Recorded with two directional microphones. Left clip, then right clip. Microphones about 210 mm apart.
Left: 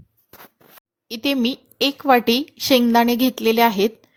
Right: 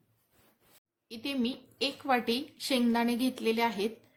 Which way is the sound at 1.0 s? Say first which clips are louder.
Left 13 dB; 40° left (ahead or behind).